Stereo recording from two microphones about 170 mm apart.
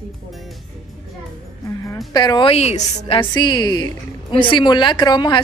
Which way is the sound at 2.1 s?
25° left (ahead or behind).